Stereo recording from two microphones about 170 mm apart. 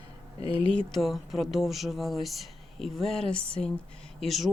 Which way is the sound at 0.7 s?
Centre (ahead or behind).